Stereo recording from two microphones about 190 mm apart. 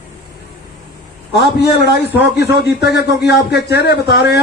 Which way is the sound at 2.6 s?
60° left (ahead or behind).